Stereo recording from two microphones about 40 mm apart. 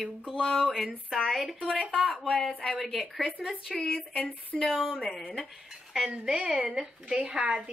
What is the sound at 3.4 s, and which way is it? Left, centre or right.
Speech, right.